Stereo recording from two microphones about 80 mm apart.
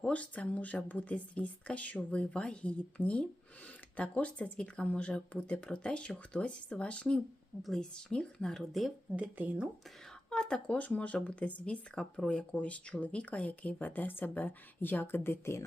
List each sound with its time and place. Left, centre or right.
0.0 s a woman's voice: centre
9.1 s speech: centre
10.2 s speech: centre; by 15.6 s left